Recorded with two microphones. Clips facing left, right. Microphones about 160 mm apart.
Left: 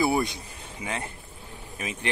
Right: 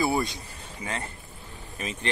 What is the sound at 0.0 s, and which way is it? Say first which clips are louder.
Speech: left 2 dB; 20° left (ahead or behind).